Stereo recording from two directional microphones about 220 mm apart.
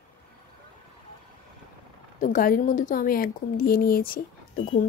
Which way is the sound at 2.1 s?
35° left (ahead or behind).